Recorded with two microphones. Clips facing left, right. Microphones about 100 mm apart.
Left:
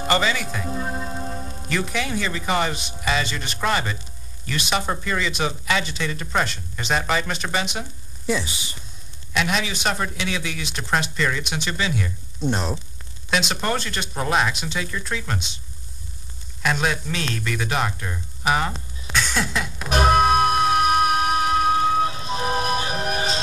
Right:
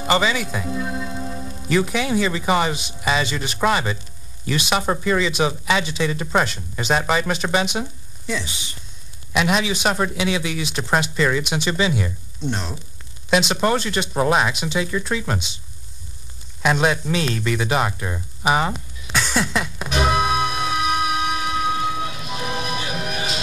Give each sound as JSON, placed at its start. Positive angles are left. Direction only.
{"t": 0.0, "sound": "speech", "side_deg": -5}
{"t": 0.7, "sound": "music", "side_deg": 40}
{"t": 1.7, "sound": "a man's voice", "side_deg": -5}
{"t": 9.6, "sound": "a man's voice", "side_deg": -5}
{"t": 12.4, "sound": "speech", "side_deg": 40}
{"t": 13.3, "sound": "a man's voice", "side_deg": 0}
{"t": 16.6, "sound": "speech", "side_deg": -5}
{"t": 19.1, "sound": "a sound", "side_deg": -5}
{"t": 19.9, "sound": "music", "side_deg": 45}